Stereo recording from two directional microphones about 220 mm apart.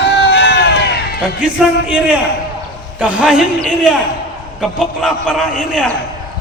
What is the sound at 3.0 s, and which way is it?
A man's voice, 5° right (ahead or behind).